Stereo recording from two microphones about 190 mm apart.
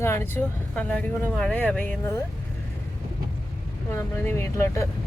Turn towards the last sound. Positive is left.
turn(degrees=15)  # may be behind; listen again after turning